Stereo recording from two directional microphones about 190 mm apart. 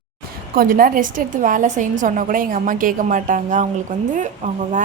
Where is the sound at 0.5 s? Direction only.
45° right (ahead or behind).